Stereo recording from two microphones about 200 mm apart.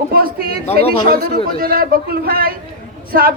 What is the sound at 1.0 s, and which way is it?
A woman's voice, 50° right (ahead or behind).